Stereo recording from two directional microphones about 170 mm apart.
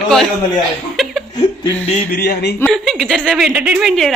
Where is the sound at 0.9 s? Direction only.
Centre (ahead or behind).